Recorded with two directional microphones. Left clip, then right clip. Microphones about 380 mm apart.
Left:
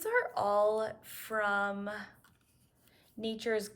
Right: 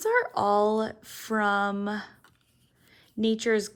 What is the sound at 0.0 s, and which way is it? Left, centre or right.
Speech, centre.